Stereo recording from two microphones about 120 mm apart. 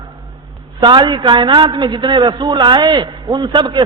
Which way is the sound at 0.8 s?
40° right (ahead or behind).